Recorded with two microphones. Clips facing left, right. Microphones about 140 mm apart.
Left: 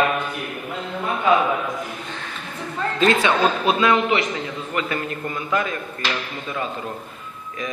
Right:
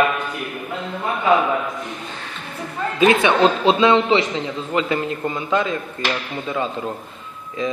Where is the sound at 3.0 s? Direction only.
20° right (ahead or behind).